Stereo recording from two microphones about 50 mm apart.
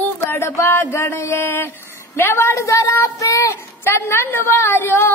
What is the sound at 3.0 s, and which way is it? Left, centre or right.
Speech, left.